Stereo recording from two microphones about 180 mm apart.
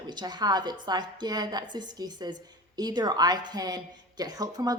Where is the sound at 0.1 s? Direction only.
25° right (ahead or behind).